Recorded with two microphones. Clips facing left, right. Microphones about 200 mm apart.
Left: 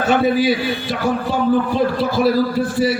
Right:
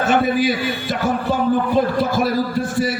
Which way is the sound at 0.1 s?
50° right (ahead or behind).